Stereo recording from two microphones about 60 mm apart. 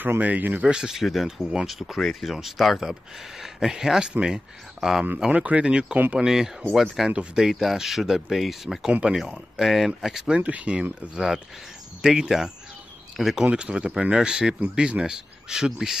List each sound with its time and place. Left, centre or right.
0.0 s speech: right
0.6 s speech: centre
1.0 s speech: centre
5.3 s speech: right; by 7.1 s centre
7.1 s speech: centre
7.4 s speech: centre
10.4 s speech: right; by 13.5 s centre
13.5 s speech: centre